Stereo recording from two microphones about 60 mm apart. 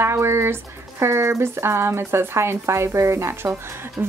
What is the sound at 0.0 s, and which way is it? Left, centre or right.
A woman's voice, right.